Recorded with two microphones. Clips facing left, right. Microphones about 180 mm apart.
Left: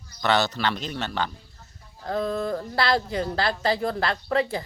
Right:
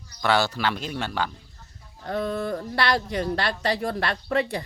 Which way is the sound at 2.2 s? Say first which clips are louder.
Left 1 dB; 30° left (ahead or behind).